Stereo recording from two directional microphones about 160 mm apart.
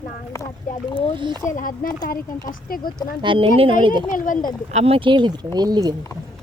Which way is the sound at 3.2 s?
35° right (ahead or behind).